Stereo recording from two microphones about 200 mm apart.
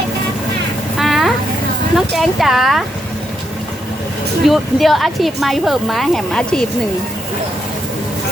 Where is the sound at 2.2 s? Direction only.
Centre (ahead or behind).